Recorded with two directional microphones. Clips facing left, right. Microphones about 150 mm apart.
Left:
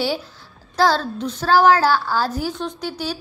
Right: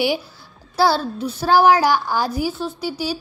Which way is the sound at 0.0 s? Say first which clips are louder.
Right 2 dB; 10° right (ahead or behind).